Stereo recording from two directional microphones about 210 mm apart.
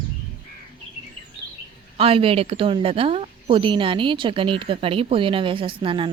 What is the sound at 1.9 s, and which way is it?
A woman's voice, 25° right (ahead or behind).